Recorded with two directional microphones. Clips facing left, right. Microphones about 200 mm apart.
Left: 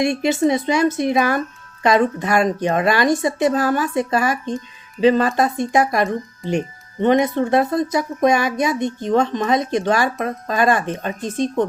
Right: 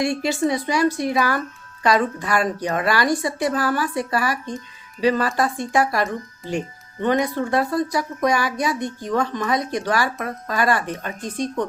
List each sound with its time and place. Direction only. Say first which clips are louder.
0.0 s a woman's voice: left 4 dB; 20° left (ahead or behind)